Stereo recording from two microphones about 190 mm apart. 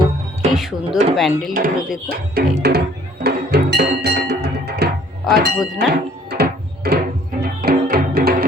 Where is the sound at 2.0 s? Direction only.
55° right (ahead or behind).